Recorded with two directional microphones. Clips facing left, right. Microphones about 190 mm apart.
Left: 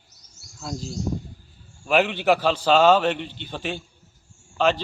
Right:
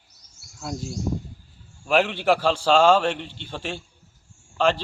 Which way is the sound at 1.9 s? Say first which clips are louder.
Left 1 dB; centre (ahead or behind).